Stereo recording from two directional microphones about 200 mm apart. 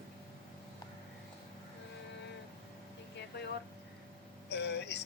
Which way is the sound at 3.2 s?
55° left (ahead or behind).